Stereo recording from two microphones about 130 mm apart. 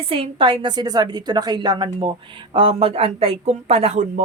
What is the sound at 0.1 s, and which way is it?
A woman's voice, 40° right (ahead or behind).